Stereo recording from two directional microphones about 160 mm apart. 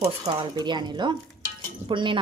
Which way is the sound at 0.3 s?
30° right (ahead or behind).